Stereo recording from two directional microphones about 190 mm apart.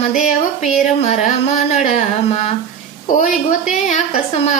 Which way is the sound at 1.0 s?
40° left (ahead or behind).